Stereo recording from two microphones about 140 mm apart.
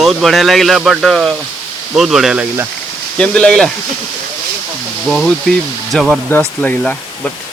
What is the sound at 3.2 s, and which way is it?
Speech, 5° left (ahead or behind).